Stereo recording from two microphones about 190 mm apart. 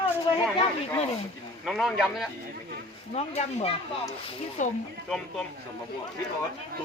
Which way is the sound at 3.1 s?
35° left (ahead or behind).